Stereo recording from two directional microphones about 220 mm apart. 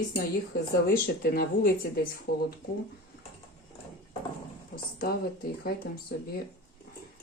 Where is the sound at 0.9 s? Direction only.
40° left (ahead or behind).